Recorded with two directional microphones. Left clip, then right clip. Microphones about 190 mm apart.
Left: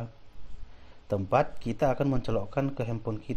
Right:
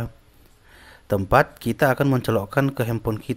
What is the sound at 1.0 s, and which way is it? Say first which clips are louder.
Speech: right 8 dB; 20° right (ahead or behind).